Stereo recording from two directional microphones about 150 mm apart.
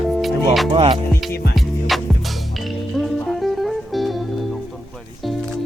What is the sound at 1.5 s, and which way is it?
Music, centre (ahead or behind).